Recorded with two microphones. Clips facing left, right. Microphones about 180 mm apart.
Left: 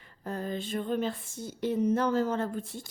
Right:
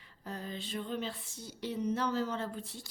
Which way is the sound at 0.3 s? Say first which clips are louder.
Left 7 dB; 50° left (ahead or behind).